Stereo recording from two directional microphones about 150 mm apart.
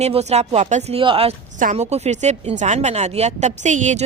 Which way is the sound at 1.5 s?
55° right (ahead or behind).